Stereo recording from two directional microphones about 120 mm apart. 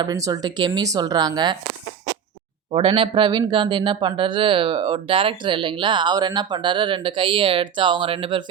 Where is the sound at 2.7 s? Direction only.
50° right (ahead or behind).